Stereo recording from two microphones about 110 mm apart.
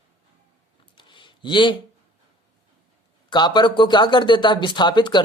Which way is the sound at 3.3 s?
45° left (ahead or behind).